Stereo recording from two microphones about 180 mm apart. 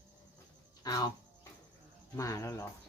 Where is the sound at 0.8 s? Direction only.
20° left (ahead or behind).